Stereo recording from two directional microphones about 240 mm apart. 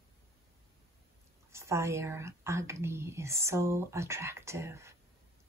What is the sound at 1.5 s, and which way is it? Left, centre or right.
Speech, centre.